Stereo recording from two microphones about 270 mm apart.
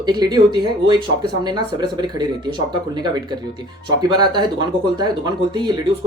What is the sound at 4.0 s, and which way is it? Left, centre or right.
Speech, centre.